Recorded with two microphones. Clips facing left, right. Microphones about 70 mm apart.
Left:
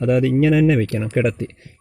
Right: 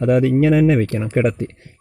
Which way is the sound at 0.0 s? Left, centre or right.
Right.